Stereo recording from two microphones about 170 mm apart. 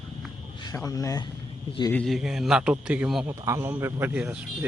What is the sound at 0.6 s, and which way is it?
Speech, 20° left (ahead or behind).